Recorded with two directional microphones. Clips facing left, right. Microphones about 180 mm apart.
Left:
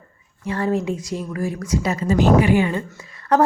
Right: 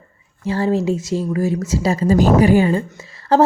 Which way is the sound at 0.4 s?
25° right (ahead or behind).